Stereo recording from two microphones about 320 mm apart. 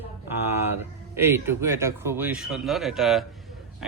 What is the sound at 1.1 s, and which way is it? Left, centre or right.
Speech, centre.